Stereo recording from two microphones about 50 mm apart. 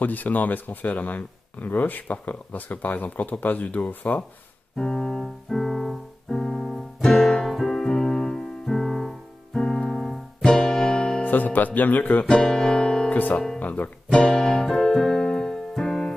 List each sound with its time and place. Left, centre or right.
0.0 s speech: left
4.7 s piano: centre
7.5 s keyboard: centre
9.6 s music: centre
11.2 s speech: left
12.3 s music: centre
13.1 s speech: left
14.1 s music: centre